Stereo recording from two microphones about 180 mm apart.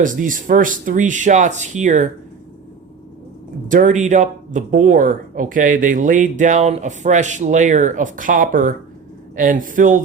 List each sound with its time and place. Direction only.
0.0 s speech: 45° right (ahead or behind)
3.7 s speech: 45° right (ahead or behind)